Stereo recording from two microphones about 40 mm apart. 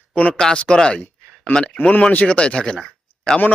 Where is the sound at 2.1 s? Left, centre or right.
Left.